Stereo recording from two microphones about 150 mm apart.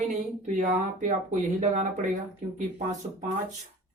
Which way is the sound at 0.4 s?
55° right (ahead or behind).